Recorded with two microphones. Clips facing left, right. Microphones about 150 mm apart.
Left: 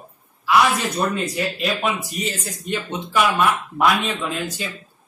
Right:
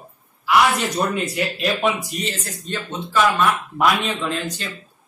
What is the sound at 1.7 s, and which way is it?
A man's voice, 5° left (ahead or behind).